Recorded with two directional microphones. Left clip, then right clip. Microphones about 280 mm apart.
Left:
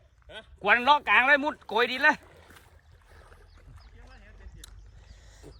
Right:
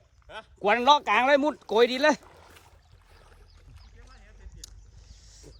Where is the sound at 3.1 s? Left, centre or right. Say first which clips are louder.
Left 2 dB; centre.